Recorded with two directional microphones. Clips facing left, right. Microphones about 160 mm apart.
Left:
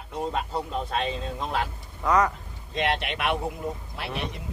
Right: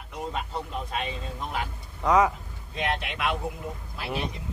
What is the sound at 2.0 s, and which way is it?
Speech, centre (ahead or behind).